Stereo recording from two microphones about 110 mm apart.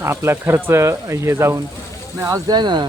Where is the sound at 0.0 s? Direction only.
25° right (ahead or behind).